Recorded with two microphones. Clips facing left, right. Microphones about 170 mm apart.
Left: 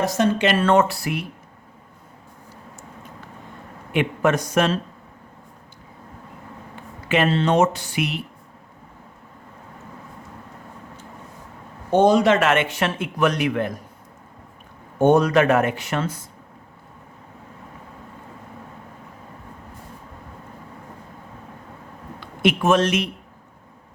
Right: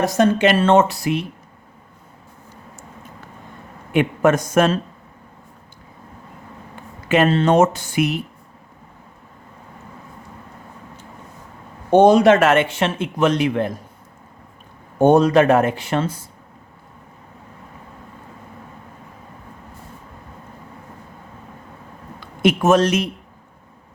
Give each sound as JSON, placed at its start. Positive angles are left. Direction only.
{"t": 0.2, "sound": "speech", "side_deg": -50}
{"t": 0.5, "sound": "speech", "side_deg": -25}
{"t": 3.9, "sound": "speech", "side_deg": -45}
{"t": 7.1, "sound": "speech", "side_deg": -45}
{"t": 11.9, "sound": "speech", "side_deg": -60}
{"t": 12.6, "sound": "speech", "side_deg": -25}
{"t": 14.9, "sound": "speech", "side_deg": -35}
{"t": 22.2, "sound": "a man's voice", "side_deg": -40}